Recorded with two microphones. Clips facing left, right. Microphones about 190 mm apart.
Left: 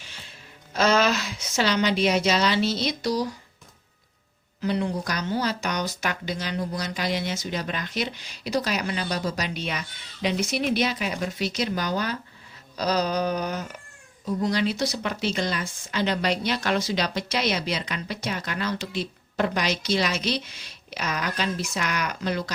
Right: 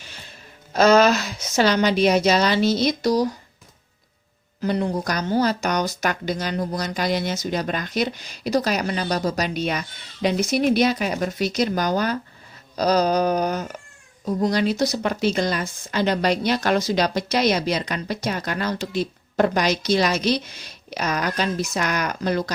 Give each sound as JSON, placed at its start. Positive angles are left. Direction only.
{"t": 0.7, "sound": "speech", "side_deg": -40}
{"t": 4.6, "sound": "speech", "side_deg": -45}